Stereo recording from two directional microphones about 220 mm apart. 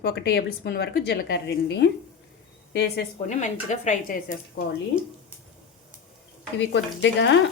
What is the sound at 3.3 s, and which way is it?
Speech, 35° left (ahead or behind).